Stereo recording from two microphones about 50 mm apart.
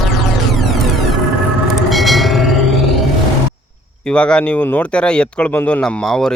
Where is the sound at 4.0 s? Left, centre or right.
Centre.